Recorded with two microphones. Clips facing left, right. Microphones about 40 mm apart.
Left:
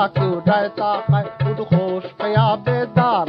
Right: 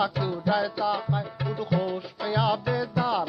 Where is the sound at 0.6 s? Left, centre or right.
Centre.